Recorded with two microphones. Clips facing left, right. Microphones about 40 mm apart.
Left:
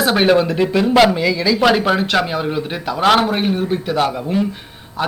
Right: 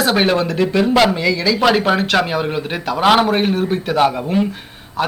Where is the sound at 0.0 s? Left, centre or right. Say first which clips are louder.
Left 2 dB; centre.